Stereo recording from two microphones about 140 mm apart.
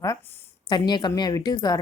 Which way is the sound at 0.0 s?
20° left (ahead or behind).